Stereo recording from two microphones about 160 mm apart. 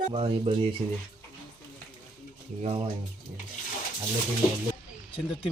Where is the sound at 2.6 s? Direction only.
40° right (ahead or behind).